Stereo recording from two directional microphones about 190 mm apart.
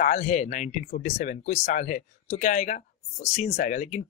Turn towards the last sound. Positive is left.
turn(degrees=40)  # may be behind; listen again after turning